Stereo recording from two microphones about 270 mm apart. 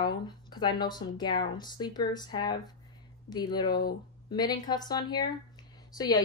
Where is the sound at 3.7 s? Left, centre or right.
Left.